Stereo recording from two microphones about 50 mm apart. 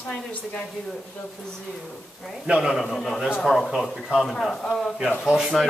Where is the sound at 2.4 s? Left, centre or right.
Right.